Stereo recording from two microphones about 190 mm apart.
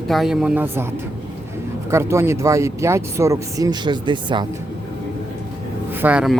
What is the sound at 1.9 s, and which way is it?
Speech, 15° right (ahead or behind).